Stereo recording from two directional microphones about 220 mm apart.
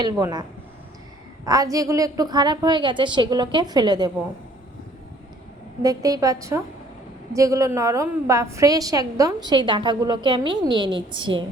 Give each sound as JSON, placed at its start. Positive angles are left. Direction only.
{"t": 0.0, "sound": "a woman's voice", "side_deg": -15}
{"t": 1.5, "sound": "a woman's voice", "side_deg": -15}
{"t": 5.8, "sound": "a woman's voice", "side_deg": -15}